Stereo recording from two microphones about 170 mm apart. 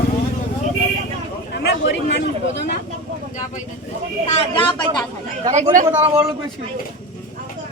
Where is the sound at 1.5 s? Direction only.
85° left.